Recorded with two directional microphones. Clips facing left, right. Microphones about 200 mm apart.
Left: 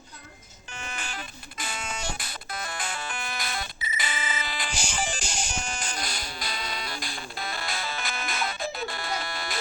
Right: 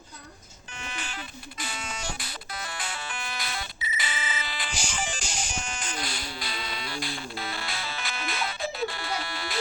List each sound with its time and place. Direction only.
0.9 s buzzer: 45° left (ahead or behind)